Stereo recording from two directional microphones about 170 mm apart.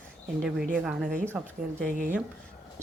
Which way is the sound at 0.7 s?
5° right (ahead or behind).